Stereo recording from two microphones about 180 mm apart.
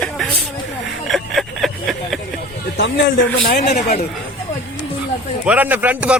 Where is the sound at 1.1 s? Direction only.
Centre (ahead or behind).